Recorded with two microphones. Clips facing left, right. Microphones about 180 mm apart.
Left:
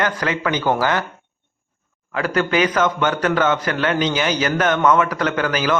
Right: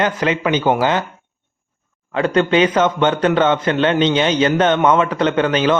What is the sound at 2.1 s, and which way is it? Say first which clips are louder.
A man's voice: right 4 dB; 25° right (ahead or behind).